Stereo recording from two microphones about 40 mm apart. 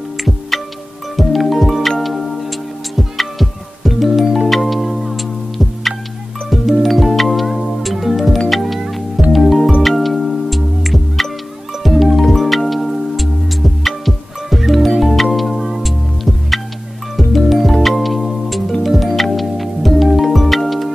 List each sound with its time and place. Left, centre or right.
0.5 s music: centre